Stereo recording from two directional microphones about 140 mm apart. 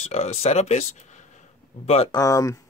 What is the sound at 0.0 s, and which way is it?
Speech, 50° left (ahead or behind).